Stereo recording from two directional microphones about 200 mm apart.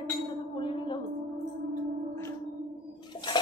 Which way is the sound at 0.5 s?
25° left (ahead or behind).